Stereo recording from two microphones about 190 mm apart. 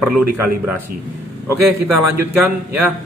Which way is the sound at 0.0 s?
5° right (ahead or behind).